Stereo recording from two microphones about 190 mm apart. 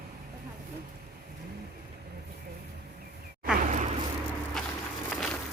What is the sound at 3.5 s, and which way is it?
Vehicle, 40° right (ahead or behind).